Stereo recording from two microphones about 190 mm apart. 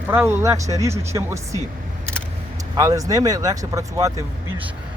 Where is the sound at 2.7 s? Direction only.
20° right (ahead or behind).